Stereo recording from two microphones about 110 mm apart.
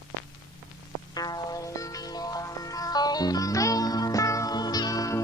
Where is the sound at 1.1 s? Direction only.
35° left (ahead or behind).